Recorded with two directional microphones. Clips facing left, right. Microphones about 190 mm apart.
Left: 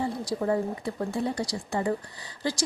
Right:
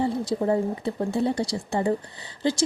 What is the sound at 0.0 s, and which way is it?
A woman's voice, 25° right (ahead or behind).